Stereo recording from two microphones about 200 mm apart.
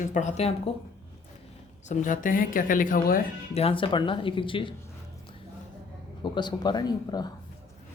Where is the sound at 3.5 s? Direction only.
30° left (ahead or behind).